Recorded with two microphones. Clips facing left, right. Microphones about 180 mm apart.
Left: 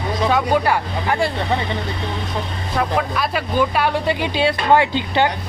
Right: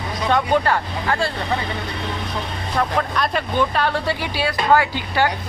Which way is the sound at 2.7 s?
5° left (ahead or behind).